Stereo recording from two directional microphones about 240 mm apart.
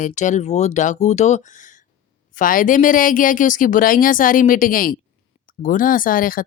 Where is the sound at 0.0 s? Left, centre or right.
Left.